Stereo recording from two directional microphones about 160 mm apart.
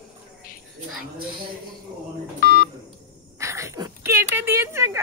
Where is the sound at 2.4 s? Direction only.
70° left (ahead or behind).